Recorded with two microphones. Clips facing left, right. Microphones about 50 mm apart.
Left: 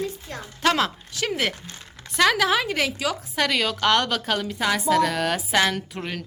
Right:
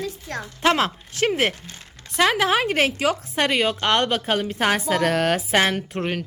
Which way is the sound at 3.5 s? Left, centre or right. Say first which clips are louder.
Even; right.